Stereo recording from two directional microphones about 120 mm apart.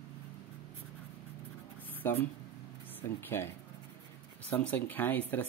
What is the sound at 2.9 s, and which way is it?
Speech, 15° left (ahead or behind).